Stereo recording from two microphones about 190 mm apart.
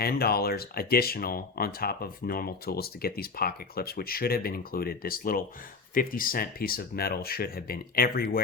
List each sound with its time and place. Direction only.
0.0 s speech: 55° left (ahead or behind)